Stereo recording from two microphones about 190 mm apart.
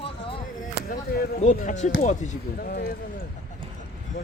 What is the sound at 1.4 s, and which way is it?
Speech, 40° left (ahead or behind).